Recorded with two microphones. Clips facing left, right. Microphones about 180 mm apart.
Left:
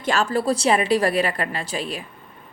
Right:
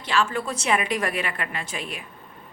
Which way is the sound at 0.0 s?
40° left (ahead or behind).